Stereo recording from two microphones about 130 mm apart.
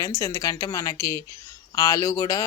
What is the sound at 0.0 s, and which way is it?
A woman's voice, 25° left (ahead or behind).